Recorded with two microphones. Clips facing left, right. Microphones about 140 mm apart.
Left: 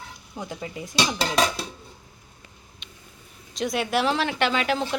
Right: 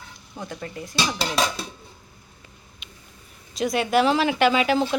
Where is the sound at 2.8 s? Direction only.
5° right (ahead or behind).